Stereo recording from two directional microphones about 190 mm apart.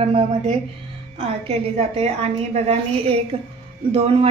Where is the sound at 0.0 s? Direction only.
30° right (ahead or behind).